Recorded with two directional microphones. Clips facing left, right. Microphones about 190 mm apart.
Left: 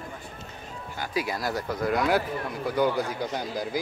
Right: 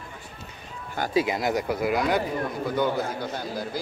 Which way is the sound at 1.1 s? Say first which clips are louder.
Right 5 dB; 20° right (ahead or behind).